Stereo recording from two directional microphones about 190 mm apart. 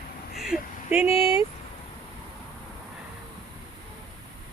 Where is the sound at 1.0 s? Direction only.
30° left (ahead or behind).